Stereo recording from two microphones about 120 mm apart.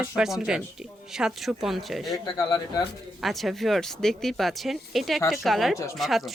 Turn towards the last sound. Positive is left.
turn(degrees=0)  # may be behind; listen again after turning